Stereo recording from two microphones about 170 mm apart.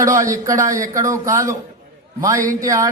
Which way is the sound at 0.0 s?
20° right (ahead or behind).